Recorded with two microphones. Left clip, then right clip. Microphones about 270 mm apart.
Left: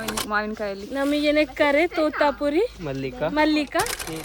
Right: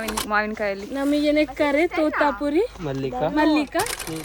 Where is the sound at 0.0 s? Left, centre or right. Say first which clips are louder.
Right 2 dB; centre.